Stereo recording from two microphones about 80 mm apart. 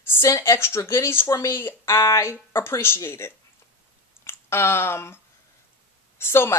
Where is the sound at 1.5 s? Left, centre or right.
Left.